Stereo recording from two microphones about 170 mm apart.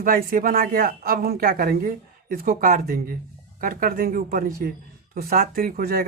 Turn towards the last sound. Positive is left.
turn(degrees=-60)  # may be behind; listen again after turning